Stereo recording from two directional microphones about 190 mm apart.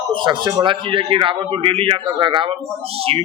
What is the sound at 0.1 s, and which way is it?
Speech, 25° right (ahead or behind).